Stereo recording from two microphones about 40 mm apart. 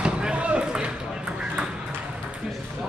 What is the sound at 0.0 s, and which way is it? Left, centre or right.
Basketball bounce, right.